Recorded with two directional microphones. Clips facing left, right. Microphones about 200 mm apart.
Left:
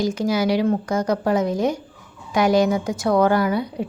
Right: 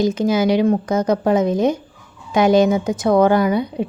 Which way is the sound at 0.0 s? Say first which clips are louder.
Right 4 dB; 20° right (ahead or behind).